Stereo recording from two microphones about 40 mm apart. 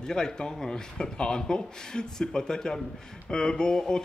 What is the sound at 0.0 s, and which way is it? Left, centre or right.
Speech, centre.